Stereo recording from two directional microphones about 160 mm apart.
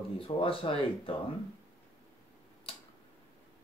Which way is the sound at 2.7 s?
35° left (ahead or behind).